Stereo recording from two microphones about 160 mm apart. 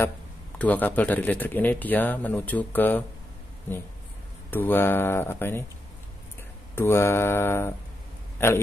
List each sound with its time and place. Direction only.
0.6 s speech: 10° left (ahead or behind)
4.5 s speech: 10° left (ahead or behind)
6.7 s speech: 15° left (ahead or behind)